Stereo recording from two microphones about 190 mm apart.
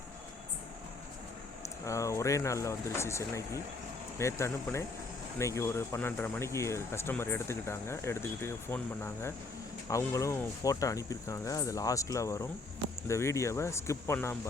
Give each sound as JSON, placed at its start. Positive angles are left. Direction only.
{"t": 1.8, "sound": "speech", "side_deg": 15}